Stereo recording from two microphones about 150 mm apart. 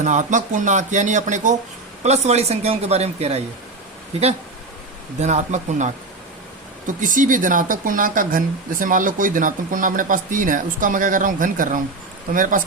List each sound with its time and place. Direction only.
0.0 s speech: 55° right (ahead or behind)
5.2 s speech: 55° right (ahead or behind)